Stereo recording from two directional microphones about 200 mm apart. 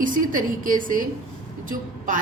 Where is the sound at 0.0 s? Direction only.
40° right (ahead or behind).